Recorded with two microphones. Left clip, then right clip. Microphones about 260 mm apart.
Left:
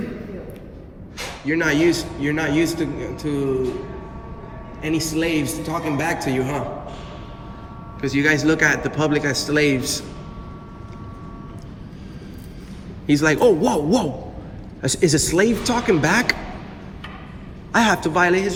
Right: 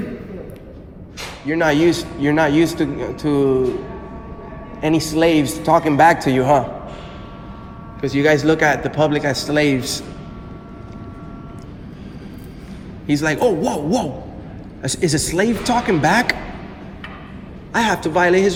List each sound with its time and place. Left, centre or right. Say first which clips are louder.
1.5 s a man's voice: right 3 dB; centre
4.8 s a man's voice: right 6 dB; centre
8.0 s a man's voice: right 3 dB; centre
13.1 s speech: left 1 dB; centre
17.7 s speech: even; centre